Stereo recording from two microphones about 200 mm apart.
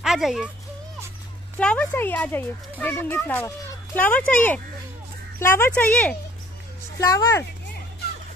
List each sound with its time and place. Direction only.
0.0 s a child's voice: centre (ahead or behind)
1.6 s a child's voice: 5° left (ahead or behind)